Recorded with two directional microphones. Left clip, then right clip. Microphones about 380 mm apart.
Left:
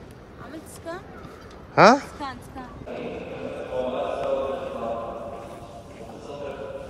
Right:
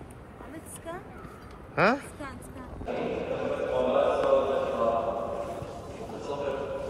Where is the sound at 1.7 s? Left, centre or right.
Centre.